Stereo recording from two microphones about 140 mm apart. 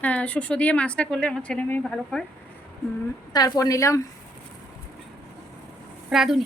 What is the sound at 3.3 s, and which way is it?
Speech, 25° left (ahead or behind).